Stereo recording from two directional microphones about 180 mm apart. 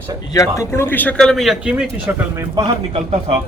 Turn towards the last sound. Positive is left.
turn(degrees=-30)  # may be behind; listen again after turning